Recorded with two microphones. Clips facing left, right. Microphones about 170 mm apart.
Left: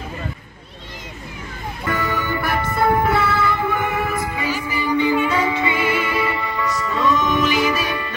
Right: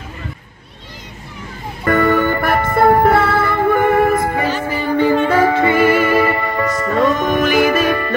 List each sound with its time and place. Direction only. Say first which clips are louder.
1.9 s music: right 10 dB; 55° right (ahead or behind)